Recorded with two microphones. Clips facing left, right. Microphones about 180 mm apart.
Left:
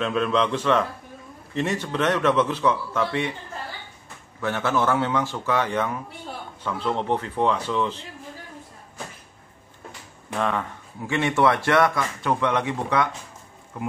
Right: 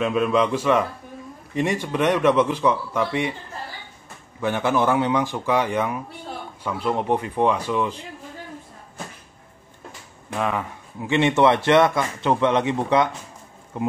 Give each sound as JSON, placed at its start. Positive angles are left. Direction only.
{"t": 0.0, "sound": "a man's voice", "side_deg": -10}
{"t": 4.4, "sound": "a man's voice", "side_deg": -15}
{"t": 10.3, "sound": "speech", "side_deg": -5}
{"t": 11.0, "sound": "a man's voice", "side_deg": -20}